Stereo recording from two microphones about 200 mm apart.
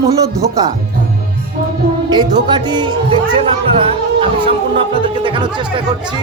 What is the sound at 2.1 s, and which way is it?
Speech, 20° right (ahead or behind).